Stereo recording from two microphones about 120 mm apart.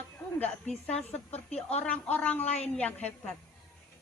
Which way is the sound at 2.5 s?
60° left (ahead or behind).